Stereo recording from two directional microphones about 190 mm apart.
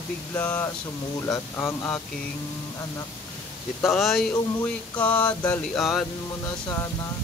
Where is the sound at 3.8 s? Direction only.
Centre (ahead or behind).